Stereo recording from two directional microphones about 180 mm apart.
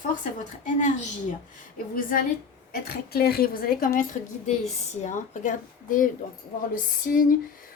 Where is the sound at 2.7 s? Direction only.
60° left (ahead or behind).